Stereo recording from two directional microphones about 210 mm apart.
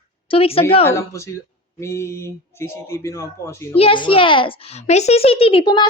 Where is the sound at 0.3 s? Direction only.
25° left (ahead or behind).